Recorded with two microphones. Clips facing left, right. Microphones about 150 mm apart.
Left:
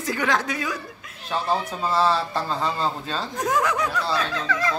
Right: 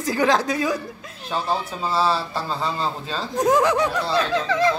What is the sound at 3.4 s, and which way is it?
Speech, 30° right (ahead or behind).